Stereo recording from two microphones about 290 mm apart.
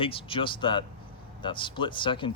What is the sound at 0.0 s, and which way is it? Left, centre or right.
Speech, centre.